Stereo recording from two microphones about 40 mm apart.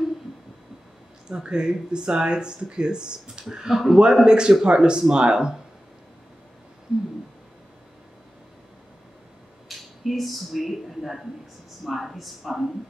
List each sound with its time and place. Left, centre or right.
1.3 s speech: right
3.6 s a woman's voice: centre
4.1 s a man's voice: centre
9.7 s a woman's voice: centre